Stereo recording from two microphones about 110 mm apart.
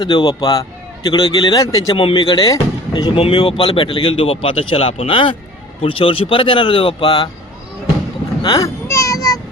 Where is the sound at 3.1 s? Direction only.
50° left (ahead or behind).